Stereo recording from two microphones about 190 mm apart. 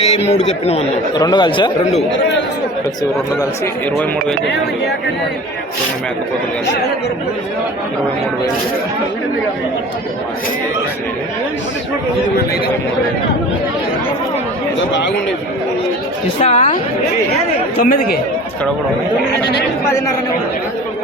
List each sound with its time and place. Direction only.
0.0 s speech: 35° left (ahead or behind)
1.1 s speech: 20° left (ahead or behind)
16.4 s speech: 35° left (ahead or behind)
17.7 s speech: 50° left (ahead or behind)